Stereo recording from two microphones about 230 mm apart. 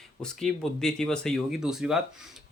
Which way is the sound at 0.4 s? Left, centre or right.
Centre.